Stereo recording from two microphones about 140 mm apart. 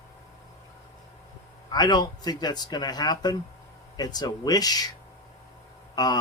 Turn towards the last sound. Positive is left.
turn(degrees=30)  # may be behind; listen again after turning